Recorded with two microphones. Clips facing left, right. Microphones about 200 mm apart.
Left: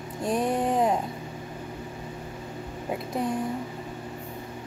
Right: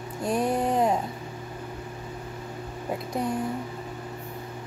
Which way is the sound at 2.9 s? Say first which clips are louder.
Even; centre (ahead or behind).